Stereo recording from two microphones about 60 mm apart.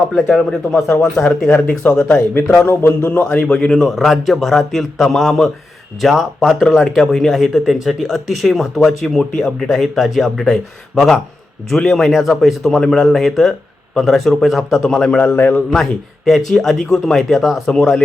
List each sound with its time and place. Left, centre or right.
0.3 s speech: centre
1.8 s a man's voice: left
2.6 s a man's voice: left
3.4 s speech: centre
15.4 s a man's voice: left
15.7 s speech: centre
17.7 s speech: centre